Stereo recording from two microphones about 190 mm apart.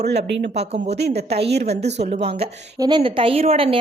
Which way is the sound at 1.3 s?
60° right (ahead or behind).